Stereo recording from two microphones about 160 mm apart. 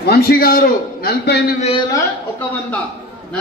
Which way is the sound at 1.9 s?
10° left (ahead or behind).